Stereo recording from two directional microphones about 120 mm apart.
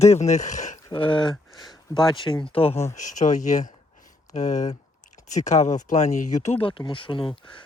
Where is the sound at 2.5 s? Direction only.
55° left (ahead or behind).